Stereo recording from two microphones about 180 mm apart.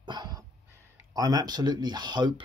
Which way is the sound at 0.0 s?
25° right (ahead or behind).